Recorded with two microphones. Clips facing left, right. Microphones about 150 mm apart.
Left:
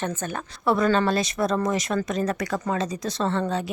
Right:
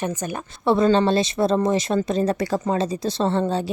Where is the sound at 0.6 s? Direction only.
25° right (ahead or behind).